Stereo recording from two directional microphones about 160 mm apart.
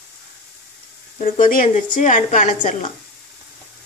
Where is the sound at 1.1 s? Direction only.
55° left (ahead or behind).